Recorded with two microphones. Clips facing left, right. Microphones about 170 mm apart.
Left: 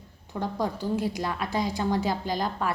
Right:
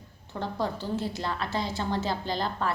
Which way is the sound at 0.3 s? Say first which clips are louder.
Left 2 dB; 15° left (ahead or behind).